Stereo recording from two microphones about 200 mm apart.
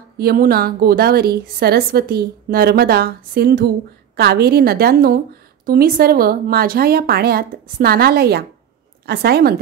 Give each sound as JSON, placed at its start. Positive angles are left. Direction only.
{"t": 0.2, "sound": "a woman's voice", "side_deg": -50}